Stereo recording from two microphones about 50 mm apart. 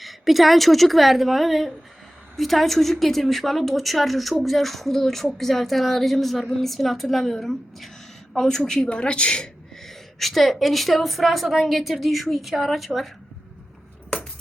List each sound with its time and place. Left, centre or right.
0.0 s a woman's voice: centre; by 9.5 s left
9.8 s a woman's voice: centre